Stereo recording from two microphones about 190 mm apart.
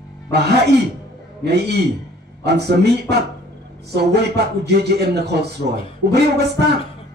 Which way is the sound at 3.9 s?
60° right (ahead or behind).